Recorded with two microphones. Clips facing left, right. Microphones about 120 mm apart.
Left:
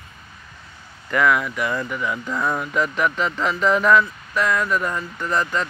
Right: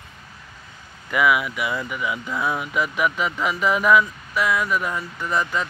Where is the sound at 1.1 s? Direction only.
10° right (ahead or behind).